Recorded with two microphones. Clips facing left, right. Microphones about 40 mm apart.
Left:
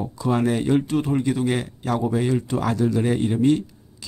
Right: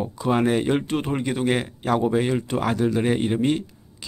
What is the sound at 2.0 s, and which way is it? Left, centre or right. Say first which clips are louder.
Speech: right 1 dB; right.